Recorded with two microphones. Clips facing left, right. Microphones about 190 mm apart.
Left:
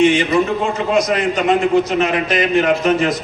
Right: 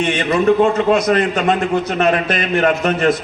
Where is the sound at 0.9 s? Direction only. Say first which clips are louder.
Right 1 dB; 60° right (ahead or behind).